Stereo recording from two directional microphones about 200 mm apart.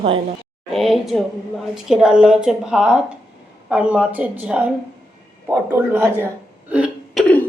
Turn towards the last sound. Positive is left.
turn(degrees=5)  # may be behind; listen again after turning